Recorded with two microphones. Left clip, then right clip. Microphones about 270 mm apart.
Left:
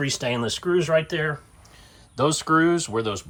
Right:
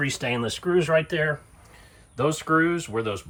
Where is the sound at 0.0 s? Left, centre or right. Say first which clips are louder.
Left 1 dB; centre.